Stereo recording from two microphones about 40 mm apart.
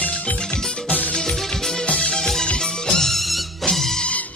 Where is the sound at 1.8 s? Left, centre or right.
Left.